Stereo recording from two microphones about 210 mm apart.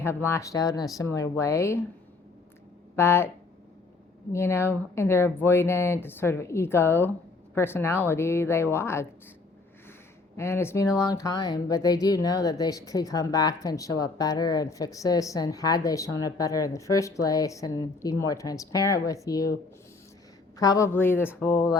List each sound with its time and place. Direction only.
0.0 s speech: 10° left (ahead or behind)
2.9 s speech: 10° left (ahead or behind)
4.3 s speech: 10° left (ahead or behind)
10.3 s speech: 10° left (ahead or behind)
20.6 s speech: 15° left (ahead or behind)